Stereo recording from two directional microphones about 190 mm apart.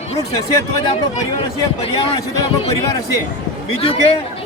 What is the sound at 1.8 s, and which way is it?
Speech, 30° left (ahead or behind).